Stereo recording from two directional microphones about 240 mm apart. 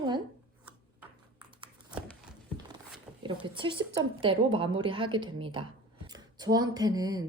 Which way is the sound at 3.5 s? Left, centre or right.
Right.